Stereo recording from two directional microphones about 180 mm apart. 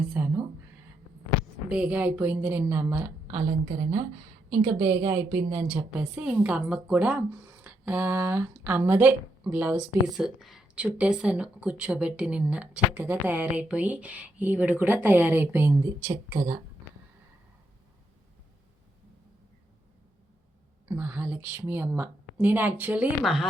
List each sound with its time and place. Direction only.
0.2 s a sound: 10° right (ahead or behind)
1.7 s a woman's voice: 5° right (ahead or behind)
3.7 s speech: 30° right (ahead or behind)
4.6 s a woman's voice: 20° right (ahead or behind)
20.8 s a woman's voice: 15° right (ahead or behind)